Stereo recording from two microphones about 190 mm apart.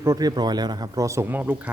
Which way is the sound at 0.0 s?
20° right (ahead or behind).